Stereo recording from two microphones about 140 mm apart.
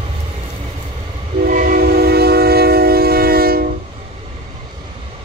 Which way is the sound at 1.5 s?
90° right.